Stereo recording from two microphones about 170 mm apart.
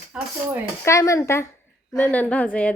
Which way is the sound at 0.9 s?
15° left (ahead or behind).